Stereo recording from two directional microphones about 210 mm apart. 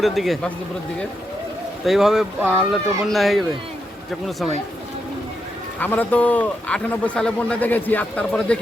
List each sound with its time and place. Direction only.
0.0 s speech: centre (ahead or behind)
1.8 s speech: centre (ahead or behind)
5.8 s a man's voice: 10° left (ahead or behind)